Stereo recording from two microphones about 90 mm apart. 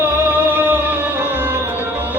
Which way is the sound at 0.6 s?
20° right (ahead or behind).